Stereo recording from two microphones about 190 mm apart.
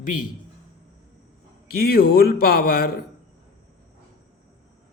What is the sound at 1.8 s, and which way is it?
A man's voice, 55° left (ahead or behind).